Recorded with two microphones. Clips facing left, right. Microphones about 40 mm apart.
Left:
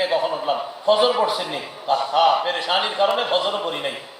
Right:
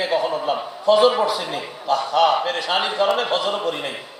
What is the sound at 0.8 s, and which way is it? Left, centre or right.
A man's voice, left.